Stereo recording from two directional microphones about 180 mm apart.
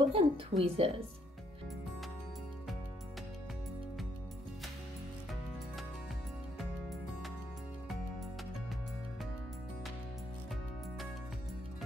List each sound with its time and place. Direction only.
0.0 s a woman's voice: 30° right (ahead or behind)